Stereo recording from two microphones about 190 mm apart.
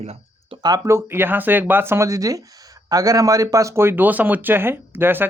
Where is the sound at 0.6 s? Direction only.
15° right (ahead or behind).